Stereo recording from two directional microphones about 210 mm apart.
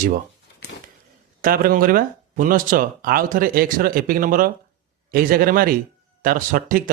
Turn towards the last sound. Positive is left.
turn(degrees=-40)  # may be behind; listen again after turning